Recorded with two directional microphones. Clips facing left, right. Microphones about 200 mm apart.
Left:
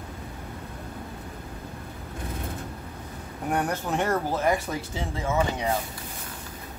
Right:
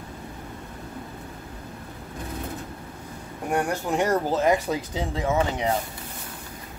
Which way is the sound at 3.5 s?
10° right (ahead or behind).